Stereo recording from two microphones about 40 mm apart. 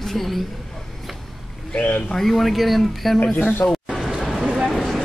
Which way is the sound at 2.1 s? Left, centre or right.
Centre.